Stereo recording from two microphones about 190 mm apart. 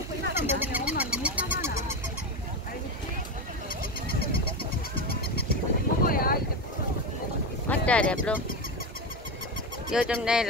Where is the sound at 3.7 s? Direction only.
50° left (ahead or behind).